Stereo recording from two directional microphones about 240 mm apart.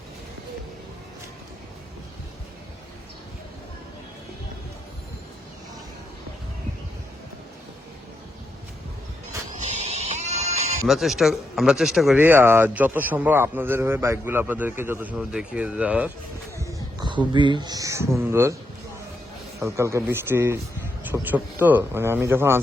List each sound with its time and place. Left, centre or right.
9.6 s music: right
10.8 s speech: centre
19.5 s speech: centre